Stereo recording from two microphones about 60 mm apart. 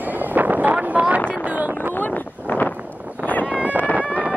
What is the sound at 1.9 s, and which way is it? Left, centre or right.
Wind noise, left.